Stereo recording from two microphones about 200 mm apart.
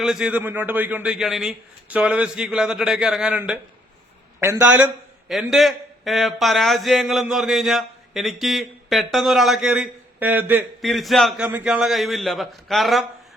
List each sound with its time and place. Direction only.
0.0 s a man's voice: 5° right (ahead or behind)